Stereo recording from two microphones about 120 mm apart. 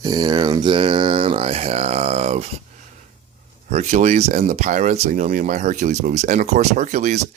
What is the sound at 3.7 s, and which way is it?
Speech, 75° right (ahead or behind).